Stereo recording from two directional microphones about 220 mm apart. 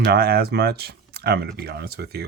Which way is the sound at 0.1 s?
45° right (ahead or behind).